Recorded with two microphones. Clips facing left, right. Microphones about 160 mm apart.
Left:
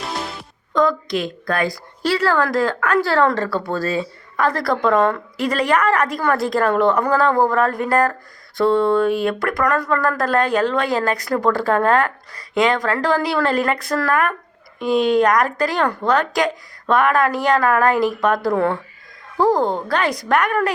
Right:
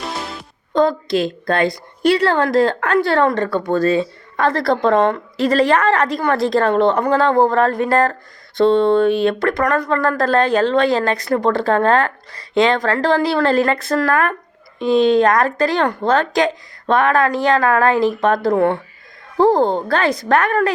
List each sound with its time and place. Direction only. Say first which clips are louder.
0.0 s music: right 1 dB; centre (ahead or behind)
0.7 s a woman's voice: right 3 dB; 30° right (ahead or behind)